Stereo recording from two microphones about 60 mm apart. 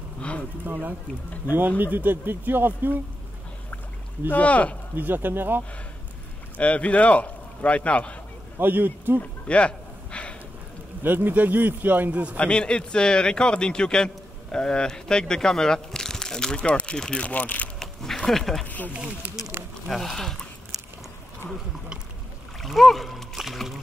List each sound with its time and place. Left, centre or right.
0.2 s a sound: left
1.8 s a man's voice: right
4.3 s speech: left
4.9 s a man's voice: right
6.6 s speech: left
8.5 s a man's voice: right
9.5 s a sound: centre
11.0 s a man's voice: right
12.4 s a man's voice: centre
17.7 s a sound: centre
19.9 s speech: centre
22.6 s speech: centre